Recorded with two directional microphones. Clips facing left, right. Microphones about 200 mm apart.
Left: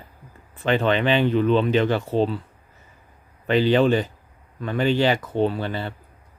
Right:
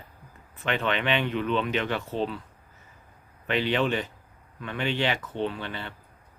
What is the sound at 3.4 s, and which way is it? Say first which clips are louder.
Speech: left 8 dB; 35° left (ahead or behind).